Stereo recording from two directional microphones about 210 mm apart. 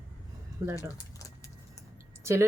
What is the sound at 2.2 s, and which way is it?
Speech, 15° right (ahead or behind).